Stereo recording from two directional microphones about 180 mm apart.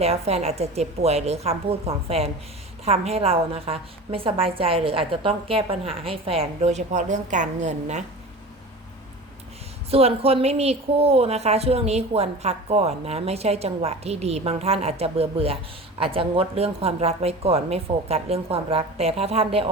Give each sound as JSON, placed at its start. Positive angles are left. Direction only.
{"t": 0.0, "sound": "a woman's voice", "side_deg": -35}
{"t": 9.9, "sound": "a woman's voice", "side_deg": -35}